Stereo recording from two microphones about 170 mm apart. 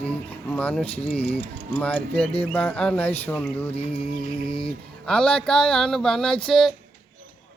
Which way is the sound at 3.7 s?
35° left (ahead or behind).